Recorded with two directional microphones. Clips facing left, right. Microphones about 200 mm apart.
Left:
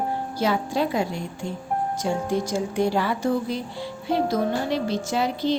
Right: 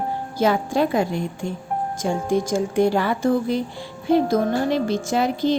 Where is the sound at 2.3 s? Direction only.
50° right (ahead or behind).